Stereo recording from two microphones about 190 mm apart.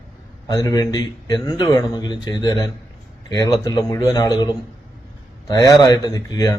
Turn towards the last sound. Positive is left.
turn(degrees=20)  # may be behind; listen again after turning